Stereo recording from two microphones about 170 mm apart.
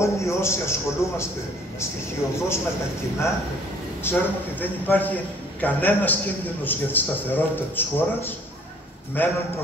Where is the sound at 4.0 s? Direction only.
10° left (ahead or behind).